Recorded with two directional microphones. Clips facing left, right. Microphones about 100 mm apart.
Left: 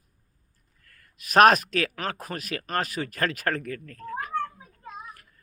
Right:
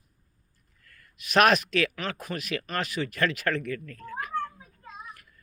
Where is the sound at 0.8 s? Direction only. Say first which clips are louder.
Right 1 dB; 40° left (ahead or behind).